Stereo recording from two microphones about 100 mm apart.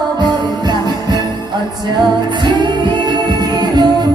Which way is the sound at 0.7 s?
45° right (ahead or behind).